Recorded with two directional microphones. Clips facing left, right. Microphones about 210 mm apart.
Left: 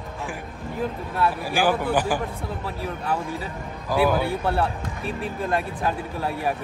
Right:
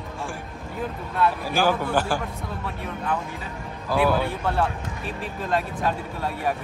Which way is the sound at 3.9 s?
10° left (ahead or behind).